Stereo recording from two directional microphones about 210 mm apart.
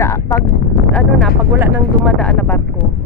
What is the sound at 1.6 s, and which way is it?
A woman's voice, centre (ahead or behind).